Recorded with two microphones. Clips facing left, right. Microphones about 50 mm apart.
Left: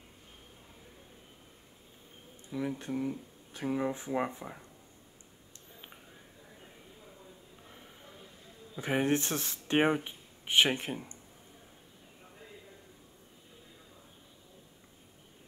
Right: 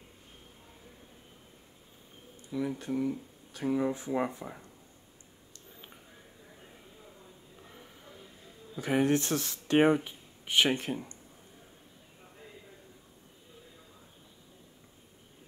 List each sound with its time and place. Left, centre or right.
2.5 s speech: left
2.9 s speech: centre
3.7 s speech: left
8.7 s speech: left